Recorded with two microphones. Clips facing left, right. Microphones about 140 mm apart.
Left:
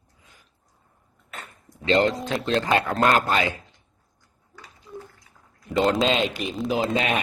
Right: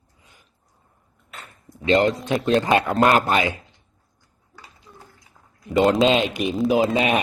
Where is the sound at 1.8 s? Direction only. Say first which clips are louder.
Right 2 dB; 20° right (ahead or behind).